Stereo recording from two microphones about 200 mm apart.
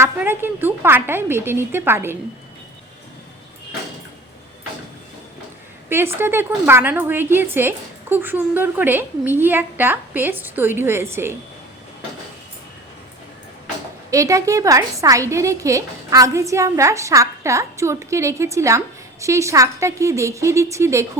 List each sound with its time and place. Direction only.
0.0 s a woman's voice: 10° right (ahead or behind)
5.9 s a woman's voice: 10° right (ahead or behind)
14.1 s a woman's voice: 15° right (ahead or behind)